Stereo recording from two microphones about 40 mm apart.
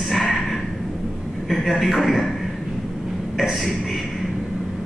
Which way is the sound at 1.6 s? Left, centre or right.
Centre.